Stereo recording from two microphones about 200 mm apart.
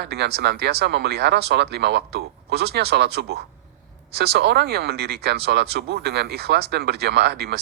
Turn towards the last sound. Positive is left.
turn(degrees=-55)  # may be behind; listen again after turning